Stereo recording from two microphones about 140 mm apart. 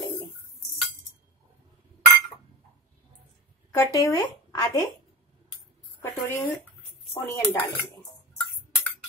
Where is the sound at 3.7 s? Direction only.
25° left (ahead or behind).